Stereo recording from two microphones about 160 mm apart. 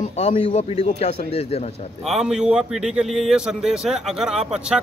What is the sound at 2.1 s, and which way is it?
A man's voice, 5° right (ahead or behind).